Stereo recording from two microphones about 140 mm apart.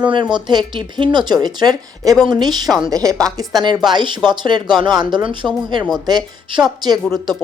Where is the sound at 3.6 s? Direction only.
30° right (ahead or behind).